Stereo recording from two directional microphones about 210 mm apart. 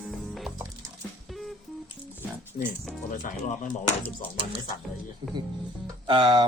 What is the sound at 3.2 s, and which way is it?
Speech, 40° left (ahead or behind).